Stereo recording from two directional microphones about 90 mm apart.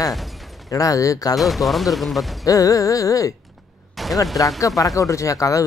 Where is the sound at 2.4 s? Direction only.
40° left (ahead or behind).